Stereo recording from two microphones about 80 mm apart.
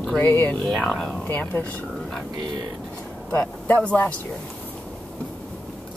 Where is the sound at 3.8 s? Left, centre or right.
Left.